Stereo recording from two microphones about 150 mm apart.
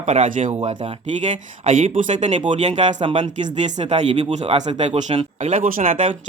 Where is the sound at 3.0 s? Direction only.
35° right (ahead or behind).